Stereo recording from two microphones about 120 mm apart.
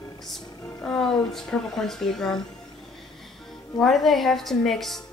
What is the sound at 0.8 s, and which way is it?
Speech, 5° left (ahead or behind).